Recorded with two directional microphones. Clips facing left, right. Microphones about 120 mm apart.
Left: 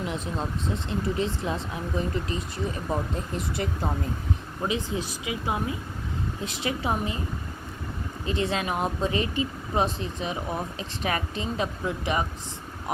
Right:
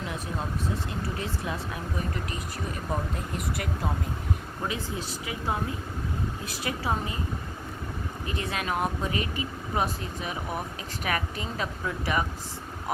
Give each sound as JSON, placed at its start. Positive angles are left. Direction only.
{"t": 0.9, "sound": "speech", "side_deg": 25}
{"t": 2.9, "sound": "speech", "side_deg": 25}
{"t": 4.7, "sound": "speech", "side_deg": 20}
{"t": 8.3, "sound": "speech", "side_deg": 25}